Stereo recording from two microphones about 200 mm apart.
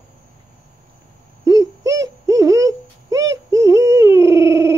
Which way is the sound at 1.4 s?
15° right (ahead or behind).